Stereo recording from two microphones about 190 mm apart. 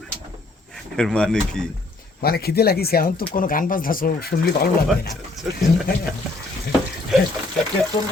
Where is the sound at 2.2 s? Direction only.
55° left (ahead or behind).